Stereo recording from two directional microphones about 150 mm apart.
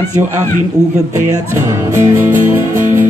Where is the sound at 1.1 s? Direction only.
15° right (ahead or behind).